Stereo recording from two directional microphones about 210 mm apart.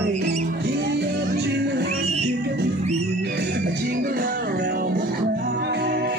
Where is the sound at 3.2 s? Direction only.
50° right (ahead or behind).